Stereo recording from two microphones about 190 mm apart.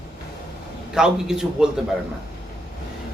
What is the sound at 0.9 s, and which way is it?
Speech, 5° right (ahead or behind).